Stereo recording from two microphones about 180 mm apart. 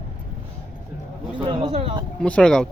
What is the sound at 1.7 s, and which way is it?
Speech, 30° right (ahead or behind).